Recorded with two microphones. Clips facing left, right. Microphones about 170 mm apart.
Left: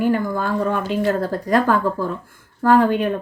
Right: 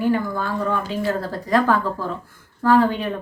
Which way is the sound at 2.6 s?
50° left (ahead or behind).